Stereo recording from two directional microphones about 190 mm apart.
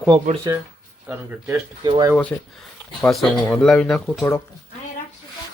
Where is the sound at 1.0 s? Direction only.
10° right (ahead or behind).